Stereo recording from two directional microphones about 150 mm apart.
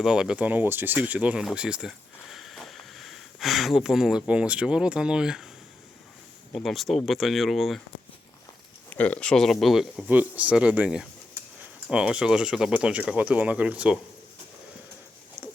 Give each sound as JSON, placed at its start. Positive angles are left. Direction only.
{"t": 0.0, "sound": "speech", "side_deg": -5}
{"t": 6.5, "sound": "speech", "side_deg": 0}
{"t": 8.9, "sound": "speech", "side_deg": 10}
{"t": 15.4, "sound": "a sound", "side_deg": -45}